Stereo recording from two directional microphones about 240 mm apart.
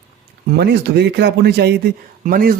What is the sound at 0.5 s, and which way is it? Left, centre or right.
A man's voice, right.